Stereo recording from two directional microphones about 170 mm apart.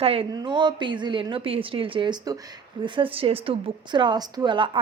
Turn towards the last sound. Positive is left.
turn(degrees=-30)  # may be behind; listen again after turning